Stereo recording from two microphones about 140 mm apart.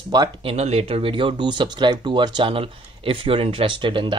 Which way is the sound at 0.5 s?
50° right (ahead or behind).